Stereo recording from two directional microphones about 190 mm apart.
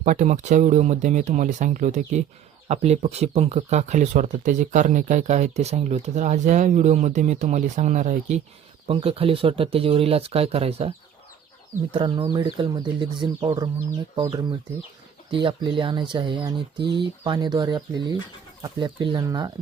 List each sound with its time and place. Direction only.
0.0 s speech: 40° right (ahead or behind); by 19.5 s 20° right (ahead or behind)